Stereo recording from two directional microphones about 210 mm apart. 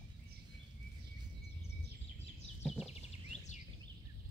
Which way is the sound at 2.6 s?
Centre (ahead or behind).